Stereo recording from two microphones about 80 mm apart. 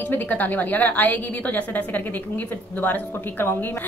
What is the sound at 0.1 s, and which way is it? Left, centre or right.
A woman's voice, left.